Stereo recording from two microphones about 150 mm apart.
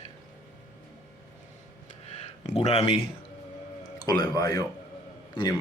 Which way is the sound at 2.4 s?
45° left (ahead or behind).